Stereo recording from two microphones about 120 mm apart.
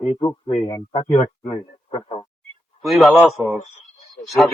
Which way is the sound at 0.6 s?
45° left (ahead or behind).